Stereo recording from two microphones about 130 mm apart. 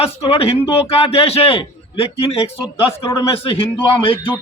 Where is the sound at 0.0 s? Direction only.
50° left (ahead or behind).